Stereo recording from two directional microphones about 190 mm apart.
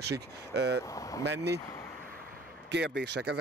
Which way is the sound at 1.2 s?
65° right (ahead or behind).